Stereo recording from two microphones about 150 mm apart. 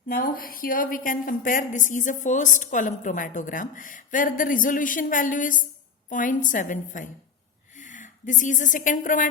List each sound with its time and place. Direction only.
0.1 s a woman's voice: 75° left (ahead or behind)